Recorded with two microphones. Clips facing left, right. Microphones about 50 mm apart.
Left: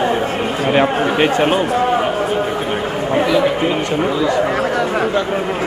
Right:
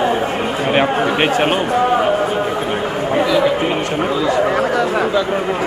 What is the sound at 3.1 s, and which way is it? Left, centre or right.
Speech, centre.